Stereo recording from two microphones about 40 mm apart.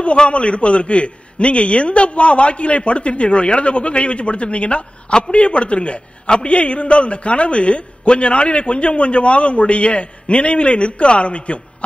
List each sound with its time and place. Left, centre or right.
0.0 s a man's voice: left